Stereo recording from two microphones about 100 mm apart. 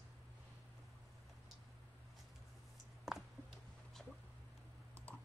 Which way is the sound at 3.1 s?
5° right (ahead or behind).